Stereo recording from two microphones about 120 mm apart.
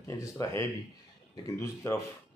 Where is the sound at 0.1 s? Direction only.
25° left (ahead or behind).